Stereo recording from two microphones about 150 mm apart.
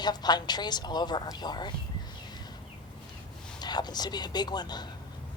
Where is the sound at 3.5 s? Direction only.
30° left (ahead or behind).